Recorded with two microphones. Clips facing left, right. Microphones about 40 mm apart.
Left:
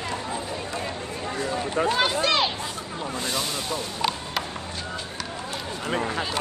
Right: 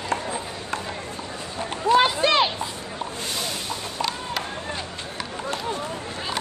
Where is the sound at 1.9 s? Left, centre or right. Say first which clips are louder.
Right 8 dB; centre.